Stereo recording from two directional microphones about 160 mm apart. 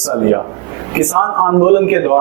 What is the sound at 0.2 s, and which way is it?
A man's voice, 20° right (ahead or behind).